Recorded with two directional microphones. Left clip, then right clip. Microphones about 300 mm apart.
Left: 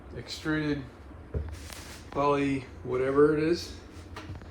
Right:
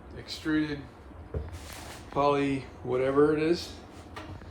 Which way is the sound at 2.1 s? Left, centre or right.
Centre.